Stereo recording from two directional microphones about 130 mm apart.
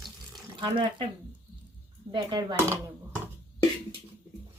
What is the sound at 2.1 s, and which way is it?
Speech, 35° right (ahead or behind).